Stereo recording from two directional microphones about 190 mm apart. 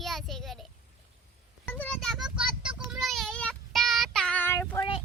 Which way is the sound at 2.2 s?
5° right (ahead or behind).